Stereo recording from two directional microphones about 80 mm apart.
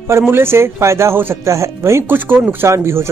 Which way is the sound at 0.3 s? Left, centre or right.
Right.